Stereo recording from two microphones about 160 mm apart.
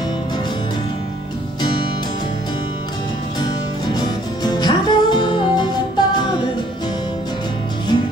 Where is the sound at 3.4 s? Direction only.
25° left (ahead or behind).